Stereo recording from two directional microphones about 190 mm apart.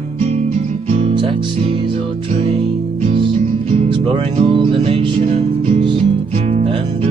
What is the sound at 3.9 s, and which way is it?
Music, 30° right (ahead or behind).